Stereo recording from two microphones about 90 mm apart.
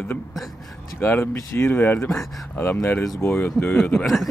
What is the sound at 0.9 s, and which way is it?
Speech, 25° left (ahead or behind).